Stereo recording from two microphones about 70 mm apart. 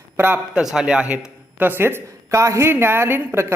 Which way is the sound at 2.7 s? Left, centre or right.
Right.